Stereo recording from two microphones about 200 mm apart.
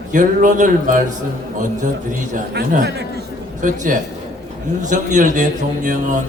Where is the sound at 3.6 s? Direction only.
40° right (ahead or behind).